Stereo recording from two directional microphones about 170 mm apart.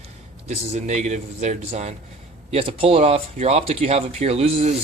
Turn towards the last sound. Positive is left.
turn(degrees=-35)  # may be behind; listen again after turning